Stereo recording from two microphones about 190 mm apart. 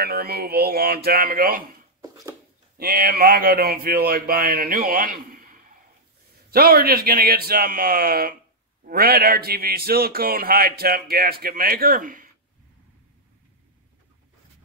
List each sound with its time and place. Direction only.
0.0 s a man's voice: 55° right (ahead or behind)
2.8 s a man's voice: 50° right (ahead or behind)